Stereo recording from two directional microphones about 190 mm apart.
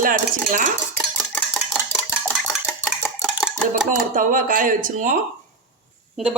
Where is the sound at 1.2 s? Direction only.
5° left (ahead or behind).